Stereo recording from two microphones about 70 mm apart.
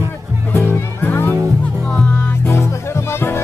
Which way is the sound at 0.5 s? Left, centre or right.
Left.